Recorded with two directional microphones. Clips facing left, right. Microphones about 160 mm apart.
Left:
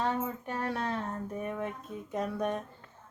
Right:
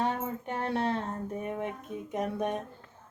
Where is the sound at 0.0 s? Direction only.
25° right (ahead or behind).